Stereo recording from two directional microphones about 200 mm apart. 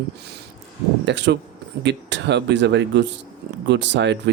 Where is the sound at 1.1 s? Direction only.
60° right (ahead or behind).